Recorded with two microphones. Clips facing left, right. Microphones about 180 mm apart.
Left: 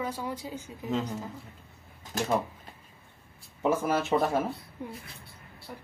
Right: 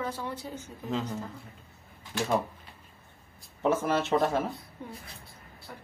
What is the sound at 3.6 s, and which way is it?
Speech, 5° left (ahead or behind).